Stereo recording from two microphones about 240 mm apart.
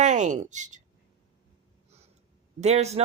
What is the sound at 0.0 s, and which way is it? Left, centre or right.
Speech, right.